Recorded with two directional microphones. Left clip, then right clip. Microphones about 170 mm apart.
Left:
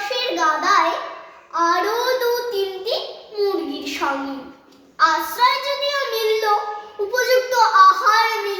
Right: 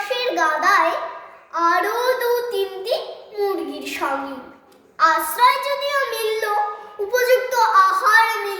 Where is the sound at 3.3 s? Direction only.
20° right (ahead or behind).